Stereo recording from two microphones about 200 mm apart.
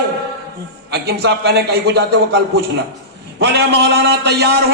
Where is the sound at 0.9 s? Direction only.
55° right (ahead or behind).